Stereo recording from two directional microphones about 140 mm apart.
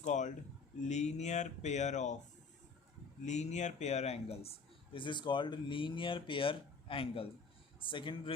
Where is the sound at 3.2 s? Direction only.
55° left (ahead or behind).